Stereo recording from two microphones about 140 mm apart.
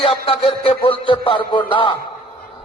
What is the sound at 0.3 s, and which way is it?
Music, 40° left (ahead or behind).